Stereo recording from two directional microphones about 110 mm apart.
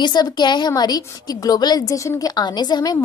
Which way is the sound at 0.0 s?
40° left (ahead or behind).